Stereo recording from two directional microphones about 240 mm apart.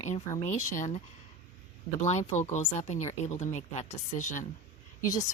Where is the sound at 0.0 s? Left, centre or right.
Left.